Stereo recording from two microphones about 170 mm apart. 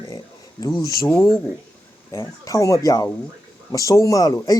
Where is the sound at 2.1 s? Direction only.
20° left (ahead or behind).